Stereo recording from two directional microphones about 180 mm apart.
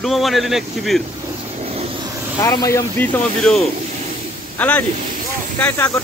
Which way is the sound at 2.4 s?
20° left (ahead or behind).